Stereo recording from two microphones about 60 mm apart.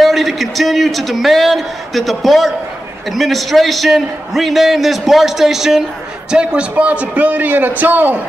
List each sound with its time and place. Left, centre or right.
0.0 s a man's voice: centre
6.3 s a man's voice: centre